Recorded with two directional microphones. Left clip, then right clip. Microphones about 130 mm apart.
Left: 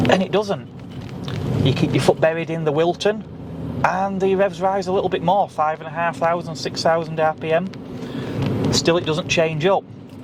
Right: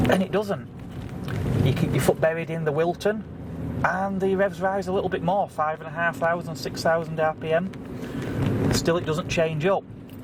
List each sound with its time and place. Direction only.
0.0 s speech: 45° left (ahead or behind)
1.6 s a man's voice: 45° left (ahead or behind)